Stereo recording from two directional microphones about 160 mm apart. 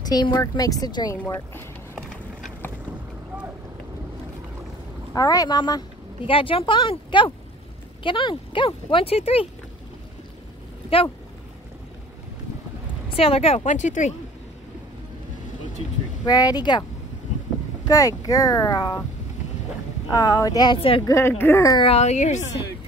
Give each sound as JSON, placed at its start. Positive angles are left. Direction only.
{"t": 0.0, "sound": "speech", "side_deg": 25}
{"t": 1.1, "sound": "speech", "side_deg": 10}
{"t": 5.1, "sound": "speech", "side_deg": 20}
{"t": 13.1, "sound": "speech", "side_deg": 35}
{"t": 13.7, "sound": "a woman's voice", "side_deg": 50}
{"t": 16.3, "sound": "speech", "side_deg": 25}
{"t": 17.8, "sound": "speech", "side_deg": 20}
{"t": 20.1, "sound": "speech", "side_deg": 20}
{"t": 21.0, "sound": "a woman's voice", "side_deg": 15}
{"t": 21.7, "sound": "a woman's voice", "side_deg": 40}